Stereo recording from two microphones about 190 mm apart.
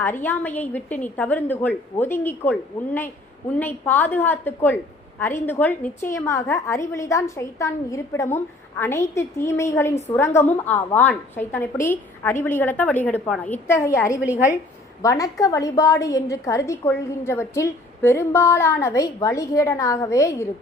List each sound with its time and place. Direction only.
0.0 s a woman's voice: 10° left (ahead or behind)